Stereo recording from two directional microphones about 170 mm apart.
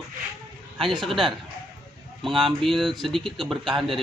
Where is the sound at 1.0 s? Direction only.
Centre (ahead or behind).